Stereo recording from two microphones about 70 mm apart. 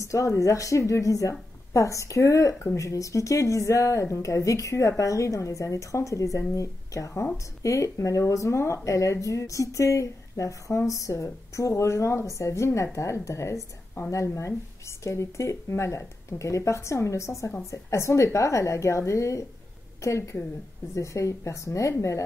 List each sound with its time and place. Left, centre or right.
0.0 s speech: left